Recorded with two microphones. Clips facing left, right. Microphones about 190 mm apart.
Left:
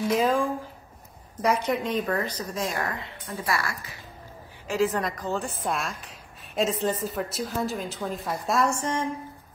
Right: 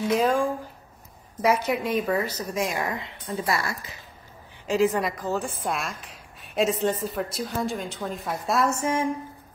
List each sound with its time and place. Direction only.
0.1 s a woman's voice: centre (ahead or behind)